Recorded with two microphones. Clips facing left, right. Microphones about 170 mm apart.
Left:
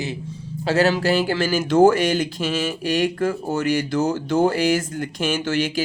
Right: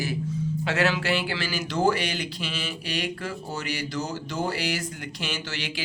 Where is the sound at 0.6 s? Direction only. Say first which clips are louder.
Left 8 dB; 35° left (ahead or behind).